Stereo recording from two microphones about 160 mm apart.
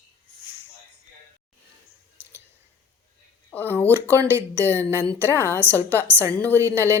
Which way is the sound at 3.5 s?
10° left (ahead or behind).